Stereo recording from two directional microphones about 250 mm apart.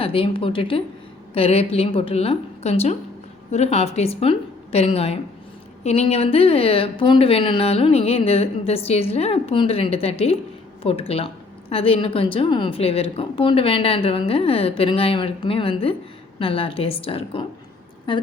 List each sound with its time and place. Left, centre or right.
0.0 s a woman's voice: left